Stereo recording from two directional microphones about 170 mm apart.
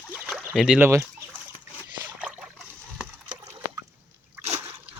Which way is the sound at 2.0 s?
5° right (ahead or behind).